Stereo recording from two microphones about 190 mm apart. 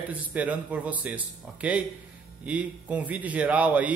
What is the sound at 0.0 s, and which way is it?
A man's voice, 10° right (ahead or behind).